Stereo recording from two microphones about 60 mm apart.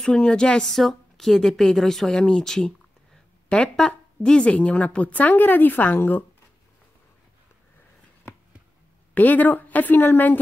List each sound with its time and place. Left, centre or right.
0.0 s a woman's voice: centre; by 6.2 s left
9.1 s a woman's voice: left